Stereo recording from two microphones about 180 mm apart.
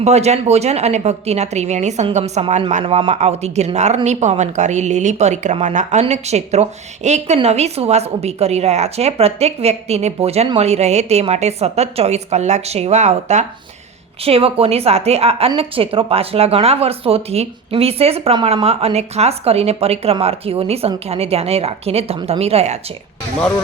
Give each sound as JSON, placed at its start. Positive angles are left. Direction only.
{"t": 0.0, "sound": "a woman's voice", "side_deg": -35}